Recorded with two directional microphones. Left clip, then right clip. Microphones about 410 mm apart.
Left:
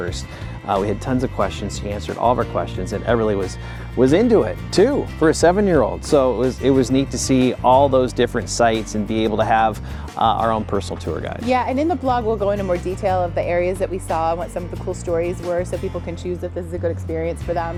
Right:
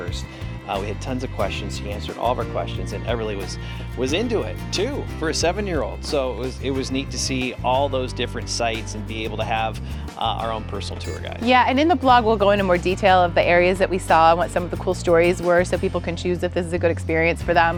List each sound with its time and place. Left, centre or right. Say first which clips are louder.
0.7 s speech: left 7 dB; left
11.1 s speech: left 8 dB; left
11.4 s speech: right 3 dB; centre